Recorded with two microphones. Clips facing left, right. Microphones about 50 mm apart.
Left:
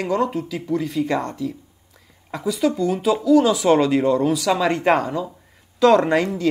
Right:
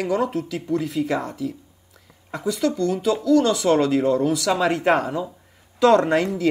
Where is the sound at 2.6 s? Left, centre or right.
Centre.